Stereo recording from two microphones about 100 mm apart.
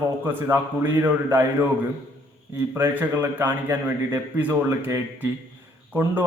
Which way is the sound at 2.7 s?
20° right (ahead or behind).